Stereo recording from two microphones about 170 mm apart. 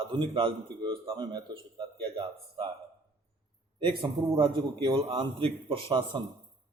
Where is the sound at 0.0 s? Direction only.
30° right (ahead or behind).